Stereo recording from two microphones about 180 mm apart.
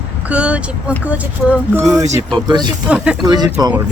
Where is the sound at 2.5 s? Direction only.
25° right (ahead or behind).